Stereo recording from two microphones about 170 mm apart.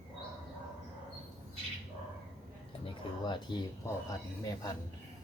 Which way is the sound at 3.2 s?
25° left (ahead or behind).